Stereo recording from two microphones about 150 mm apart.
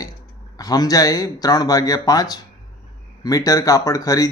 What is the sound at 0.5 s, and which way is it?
Speech, 25° left (ahead or behind).